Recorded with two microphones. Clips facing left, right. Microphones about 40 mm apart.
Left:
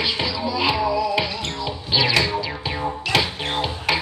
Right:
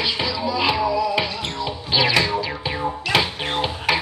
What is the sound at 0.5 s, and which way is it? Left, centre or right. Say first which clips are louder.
Music: even; centre.